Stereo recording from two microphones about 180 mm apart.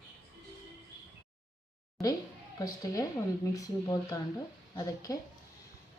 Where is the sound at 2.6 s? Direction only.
20° left (ahead or behind).